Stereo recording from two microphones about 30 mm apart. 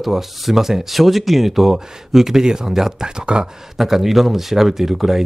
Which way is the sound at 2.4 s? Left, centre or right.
Right.